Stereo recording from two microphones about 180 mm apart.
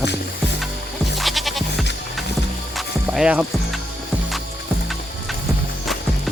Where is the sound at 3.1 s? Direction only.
5° right (ahead or behind).